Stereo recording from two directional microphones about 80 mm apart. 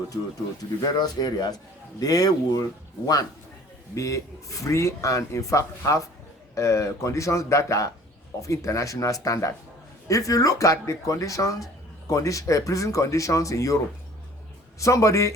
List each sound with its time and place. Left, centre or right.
0.1 s speech: left
0.8 s speech: left
3.9 s speech: left